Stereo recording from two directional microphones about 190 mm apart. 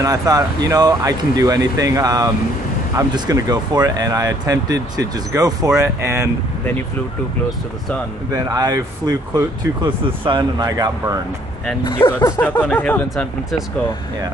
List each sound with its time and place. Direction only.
0.0 s speech: 20° right (ahead or behind)
8.3 s speech: 20° right (ahead or behind)
11.8 s speech: 20° left (ahead or behind); by 13.7 s centre (ahead or behind)